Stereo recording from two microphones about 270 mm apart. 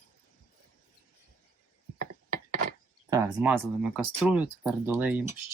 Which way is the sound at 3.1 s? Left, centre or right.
Centre.